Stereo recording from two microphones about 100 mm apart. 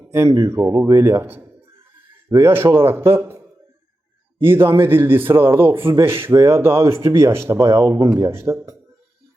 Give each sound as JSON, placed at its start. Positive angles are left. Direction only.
{"t": 0.1, "sound": "speech", "side_deg": -30}
{"t": 4.4, "sound": "speech", "side_deg": -25}